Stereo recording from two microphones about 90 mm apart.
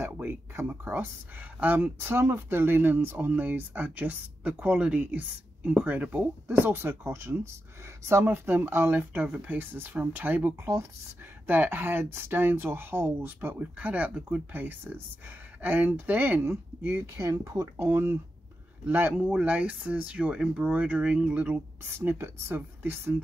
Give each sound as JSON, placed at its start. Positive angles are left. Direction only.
{"t": 0.0, "sound": "speech", "side_deg": -25}
{"t": 10.6, "sound": "speech", "side_deg": -35}
{"t": 11.4, "sound": "speech", "side_deg": -20}
{"t": 17.8, "sound": "speech", "side_deg": -25}
{"t": 19.1, "sound": "speech", "side_deg": -15}
{"t": 21.9, "sound": "speech", "side_deg": -25}